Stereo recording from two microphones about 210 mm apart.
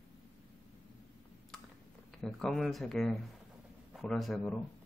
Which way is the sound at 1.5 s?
Centre (ahead or behind).